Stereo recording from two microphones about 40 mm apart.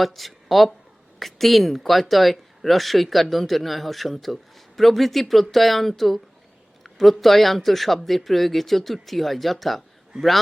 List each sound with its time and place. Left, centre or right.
0.0 s speech: centre
10.1 s a man's voice: centre